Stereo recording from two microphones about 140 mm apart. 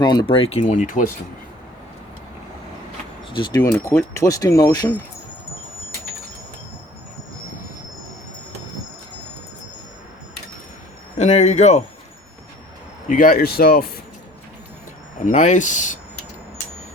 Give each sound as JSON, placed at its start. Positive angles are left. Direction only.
{"t": 0.0, "sound": "speech", "side_deg": 30}
{"t": 0.6, "sound": "speech", "side_deg": 70}
{"t": 3.3, "sound": "speech", "side_deg": 30}
{"t": 3.7, "sound": "speech", "side_deg": 20}
{"t": 11.2, "sound": "a man's voice", "side_deg": 55}
{"t": 13.1, "sound": "speech", "side_deg": 85}
{"t": 15.2, "sound": "speech", "side_deg": 60}